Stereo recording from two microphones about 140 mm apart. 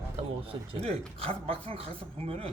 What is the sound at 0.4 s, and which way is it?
Speech, 45° right (ahead or behind).